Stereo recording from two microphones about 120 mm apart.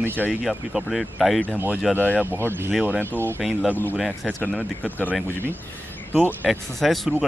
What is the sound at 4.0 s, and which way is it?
Speech, 5° left (ahead or behind).